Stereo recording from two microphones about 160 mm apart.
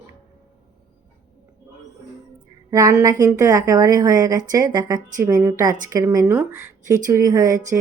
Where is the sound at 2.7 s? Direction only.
20° right (ahead or behind).